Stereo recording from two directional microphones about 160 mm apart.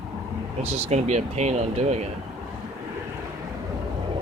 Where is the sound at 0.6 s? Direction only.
40° right (ahead or behind).